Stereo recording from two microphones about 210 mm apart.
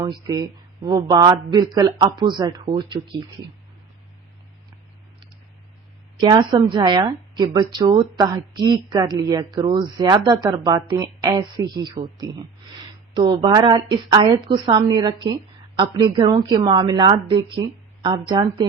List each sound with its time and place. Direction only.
0.0 s a woman's voice: 15° right (ahead or behind)
6.1 s a woman's voice: 20° right (ahead or behind)